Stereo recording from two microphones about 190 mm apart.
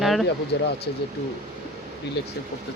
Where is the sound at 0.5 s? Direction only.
65° left (ahead or behind).